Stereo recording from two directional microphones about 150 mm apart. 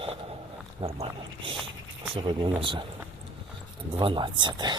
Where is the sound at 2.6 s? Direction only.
35° right (ahead or behind).